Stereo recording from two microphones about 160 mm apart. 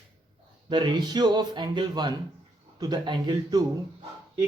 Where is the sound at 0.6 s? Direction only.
30° right (ahead or behind).